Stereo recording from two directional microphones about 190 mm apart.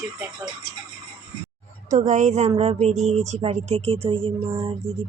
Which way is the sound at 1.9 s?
40° right (ahead or behind).